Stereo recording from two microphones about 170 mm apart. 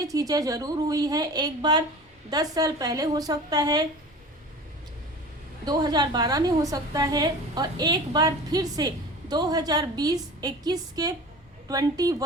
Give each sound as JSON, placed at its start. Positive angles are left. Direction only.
{"t": 0.1, "sound": "a woman's voice", "side_deg": -20}
{"t": 5.6, "sound": "a woman's voice", "side_deg": -25}